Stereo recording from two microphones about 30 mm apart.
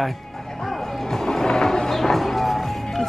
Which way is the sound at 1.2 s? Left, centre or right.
Centre.